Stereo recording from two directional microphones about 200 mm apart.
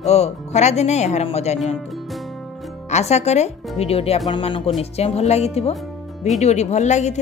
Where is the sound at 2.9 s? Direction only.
35° left (ahead or behind).